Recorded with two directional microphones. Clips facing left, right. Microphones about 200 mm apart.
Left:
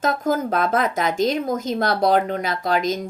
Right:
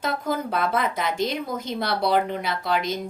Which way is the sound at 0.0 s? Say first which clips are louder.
Left 5 dB; 45° left (ahead or behind).